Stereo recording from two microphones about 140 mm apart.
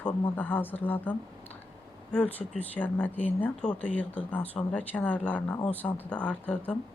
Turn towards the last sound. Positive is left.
turn(degrees=10)  # may be behind; listen again after turning